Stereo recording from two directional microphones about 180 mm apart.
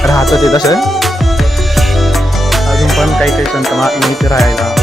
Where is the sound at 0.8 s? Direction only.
Centre (ahead or behind).